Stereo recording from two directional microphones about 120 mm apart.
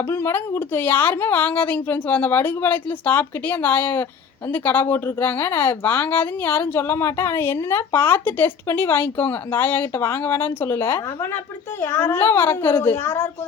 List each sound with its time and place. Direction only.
0.1 s a child's voice: 20° left (ahead or behind)